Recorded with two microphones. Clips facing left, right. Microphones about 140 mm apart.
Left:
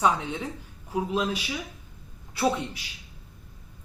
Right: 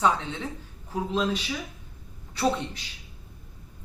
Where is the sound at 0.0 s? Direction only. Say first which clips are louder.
Even; 15° left (ahead or behind).